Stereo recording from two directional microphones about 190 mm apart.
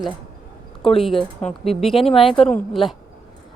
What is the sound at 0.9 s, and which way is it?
Speech, centre (ahead or behind).